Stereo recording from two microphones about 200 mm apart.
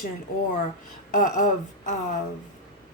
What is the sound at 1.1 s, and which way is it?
Speech, 40° left (ahead or behind).